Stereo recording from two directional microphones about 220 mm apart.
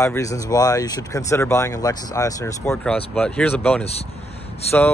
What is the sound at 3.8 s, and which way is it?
Speech, 30° left (ahead or behind).